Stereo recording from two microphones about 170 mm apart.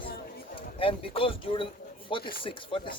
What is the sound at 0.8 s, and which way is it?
Speech, 30° left (ahead or behind).